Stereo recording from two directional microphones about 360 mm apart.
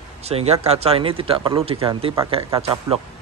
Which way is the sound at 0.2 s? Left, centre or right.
Centre.